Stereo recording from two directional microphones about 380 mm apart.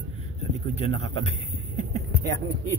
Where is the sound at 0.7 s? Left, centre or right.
Centre.